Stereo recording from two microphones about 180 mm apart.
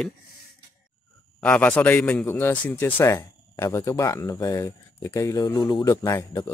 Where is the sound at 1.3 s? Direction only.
5° left (ahead or behind).